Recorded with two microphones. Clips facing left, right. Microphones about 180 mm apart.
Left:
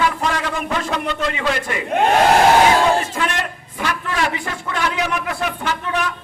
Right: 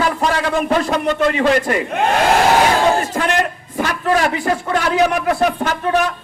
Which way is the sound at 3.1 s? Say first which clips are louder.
Right 5 dB; 40° right (ahead or behind).